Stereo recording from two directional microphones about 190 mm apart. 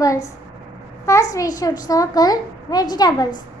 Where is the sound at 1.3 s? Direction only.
20° left (ahead or behind).